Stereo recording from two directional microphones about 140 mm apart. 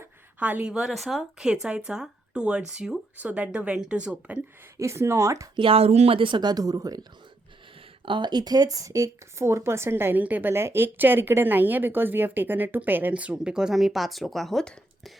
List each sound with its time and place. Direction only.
0.0 s speech: 10° right (ahead or behind)
4.8 s speech: 20° right (ahead or behind)
5.5 s speech: 40° right (ahead or behind); by 7.0 s 25° right (ahead or behind)
8.0 s speech: 35° right (ahead or behind); by 15.1 s centre (ahead or behind)